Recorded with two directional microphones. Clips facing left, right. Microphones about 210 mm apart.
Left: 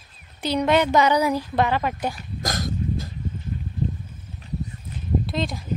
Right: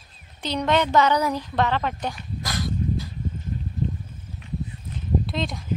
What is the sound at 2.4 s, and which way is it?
Dog, 45° left (ahead or behind).